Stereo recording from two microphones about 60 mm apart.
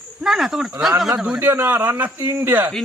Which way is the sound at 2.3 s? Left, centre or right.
Right.